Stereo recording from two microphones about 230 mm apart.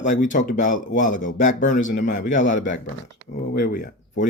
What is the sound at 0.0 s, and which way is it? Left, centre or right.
Speech, left.